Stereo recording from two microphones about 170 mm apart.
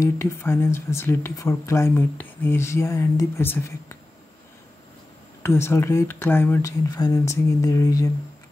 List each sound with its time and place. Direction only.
0.0 s speech: 15° left (ahead or behind)
5.4 s speech: 15° left (ahead or behind)